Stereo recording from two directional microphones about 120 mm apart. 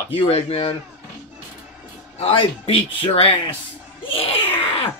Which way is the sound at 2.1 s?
55° left (ahead or behind).